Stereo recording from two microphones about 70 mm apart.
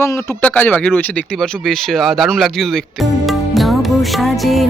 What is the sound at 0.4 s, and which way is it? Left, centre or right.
Speech, left.